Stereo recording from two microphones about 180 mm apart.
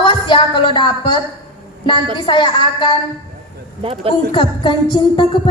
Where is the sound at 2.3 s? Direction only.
25° left (ahead or behind).